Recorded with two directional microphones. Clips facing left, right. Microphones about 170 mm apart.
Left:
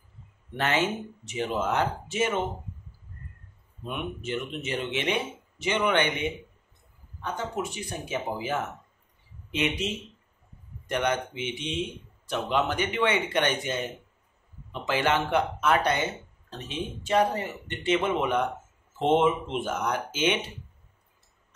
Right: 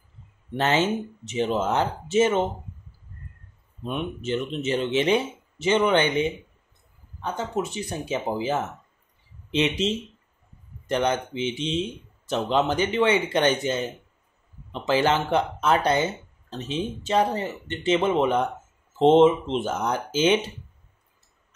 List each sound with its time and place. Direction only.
0.6 s speech: 25° right (ahead or behind)
3.8 s speech: 30° right (ahead or behind)